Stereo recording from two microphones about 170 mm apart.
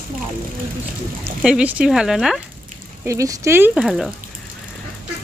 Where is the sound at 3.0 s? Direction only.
20° right (ahead or behind); by 4.0 s centre (ahead or behind).